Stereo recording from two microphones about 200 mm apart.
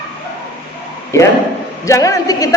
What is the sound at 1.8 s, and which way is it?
Speech, 15° left (ahead or behind).